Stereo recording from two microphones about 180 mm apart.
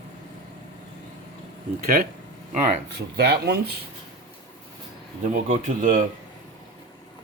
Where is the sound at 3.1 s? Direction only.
65° right (ahead or behind).